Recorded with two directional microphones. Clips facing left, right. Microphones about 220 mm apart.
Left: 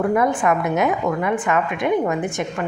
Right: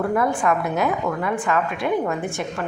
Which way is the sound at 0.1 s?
20° left (ahead or behind).